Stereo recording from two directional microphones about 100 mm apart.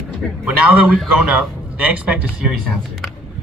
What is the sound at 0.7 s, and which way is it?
Speech, 15° right (ahead or behind).